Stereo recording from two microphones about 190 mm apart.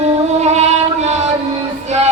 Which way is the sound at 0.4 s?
35° right (ahead or behind).